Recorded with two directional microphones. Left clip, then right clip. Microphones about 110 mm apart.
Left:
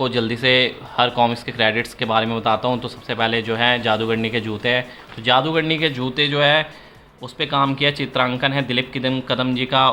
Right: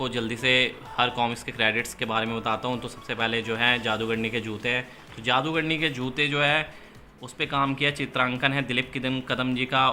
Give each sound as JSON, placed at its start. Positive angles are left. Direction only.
{"t": 0.0, "sound": "speech", "side_deg": 50}